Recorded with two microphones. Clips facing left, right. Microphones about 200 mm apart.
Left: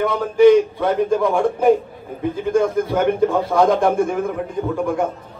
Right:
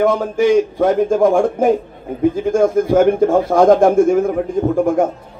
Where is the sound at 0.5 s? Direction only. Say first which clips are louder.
Right 2 dB; 45° right (ahead or behind).